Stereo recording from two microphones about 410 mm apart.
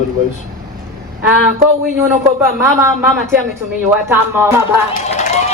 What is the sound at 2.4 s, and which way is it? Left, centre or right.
Speech, centre.